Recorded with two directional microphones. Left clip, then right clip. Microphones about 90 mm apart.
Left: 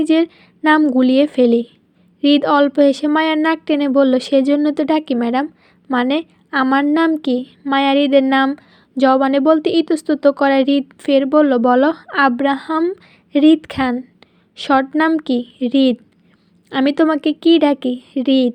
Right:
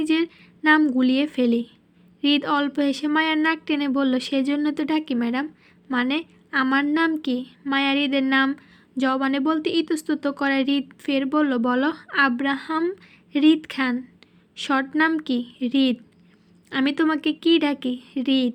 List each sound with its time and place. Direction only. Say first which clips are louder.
0.0 s a woman's voice: left 7 dB; 50° left (ahead or behind)
14.2 s a sound: left 3 dB; 45° left (ahead or behind)
15.2 s speech: left 7 dB; 55° left (ahead or behind)